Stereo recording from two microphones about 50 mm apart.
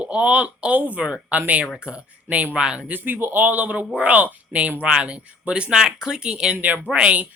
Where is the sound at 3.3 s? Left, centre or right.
Right.